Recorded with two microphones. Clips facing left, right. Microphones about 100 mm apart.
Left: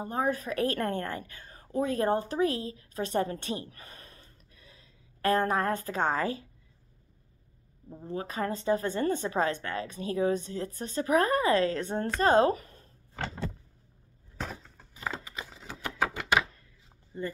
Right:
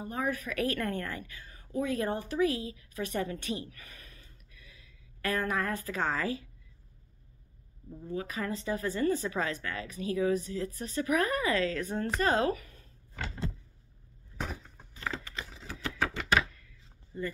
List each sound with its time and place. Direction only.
0.0 s a woman's voice: 30° left (ahead or behind)
7.9 s a woman's voice: 35° left (ahead or behind)
14.4 s a sound: 10° right (ahead or behind)
15.0 s typewriter: 20° left (ahead or behind)
17.1 s speech: 25° left (ahead or behind)